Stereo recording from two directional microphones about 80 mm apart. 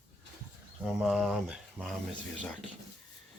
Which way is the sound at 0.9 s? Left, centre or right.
Centre.